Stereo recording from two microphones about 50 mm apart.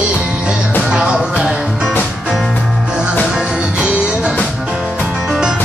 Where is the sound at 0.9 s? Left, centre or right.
Centre.